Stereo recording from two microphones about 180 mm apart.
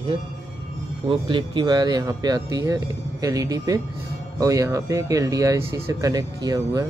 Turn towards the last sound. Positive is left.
turn(degrees=-20)  # may be behind; listen again after turning